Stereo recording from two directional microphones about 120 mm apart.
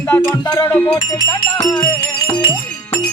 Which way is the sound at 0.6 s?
15° left (ahead or behind).